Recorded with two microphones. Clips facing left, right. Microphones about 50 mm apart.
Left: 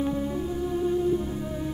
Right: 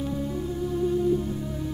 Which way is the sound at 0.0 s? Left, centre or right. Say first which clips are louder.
Left 2 dB; centre.